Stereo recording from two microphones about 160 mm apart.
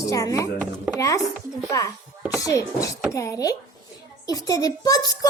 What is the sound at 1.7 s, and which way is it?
A child's voice, 20° left (ahead or behind).